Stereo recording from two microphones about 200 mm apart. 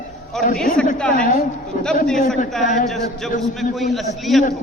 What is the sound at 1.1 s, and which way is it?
Speech, 45° left (ahead or behind).